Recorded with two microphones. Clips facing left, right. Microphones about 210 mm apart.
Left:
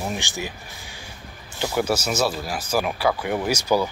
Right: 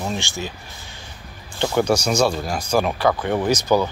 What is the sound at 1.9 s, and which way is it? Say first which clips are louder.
Speech: right 4 dB; 5° left (ahead or behind).